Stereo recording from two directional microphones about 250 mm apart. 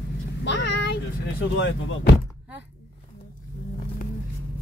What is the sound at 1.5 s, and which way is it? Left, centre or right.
Speech, left.